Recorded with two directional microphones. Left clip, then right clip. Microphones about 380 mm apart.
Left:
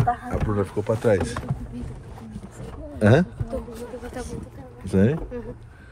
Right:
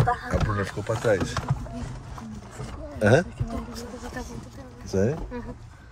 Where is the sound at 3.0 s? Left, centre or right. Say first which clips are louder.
Left 1 dB; centre.